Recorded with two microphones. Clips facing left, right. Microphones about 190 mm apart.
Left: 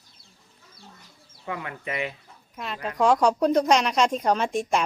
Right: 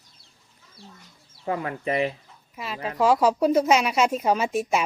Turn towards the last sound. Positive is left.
turn(degrees=-5)  # may be behind; listen again after turning